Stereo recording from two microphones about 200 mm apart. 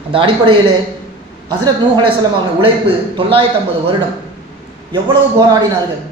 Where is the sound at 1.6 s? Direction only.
25° right (ahead or behind).